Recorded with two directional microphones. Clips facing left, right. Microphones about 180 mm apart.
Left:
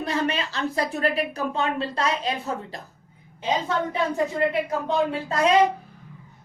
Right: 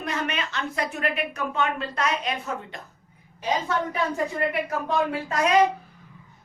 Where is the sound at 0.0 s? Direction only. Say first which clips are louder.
Left 4 dB; 30° left (ahead or behind).